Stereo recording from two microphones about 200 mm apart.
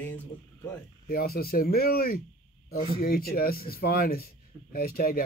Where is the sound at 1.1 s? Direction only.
50° left (ahead or behind).